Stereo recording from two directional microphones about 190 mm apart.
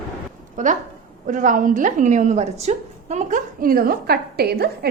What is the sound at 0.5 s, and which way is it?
A woman's voice, 40° right (ahead or behind).